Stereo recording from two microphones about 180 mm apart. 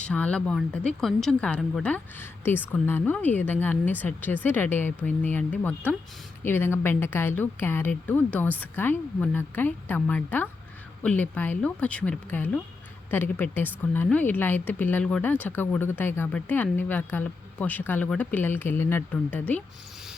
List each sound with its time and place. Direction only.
0.0 s a woman's voice: 5° left (ahead or behind)